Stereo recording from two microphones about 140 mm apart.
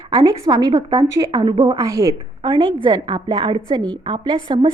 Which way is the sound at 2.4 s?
40° right (ahead or behind).